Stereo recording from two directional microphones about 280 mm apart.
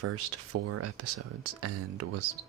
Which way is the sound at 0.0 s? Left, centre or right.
Right.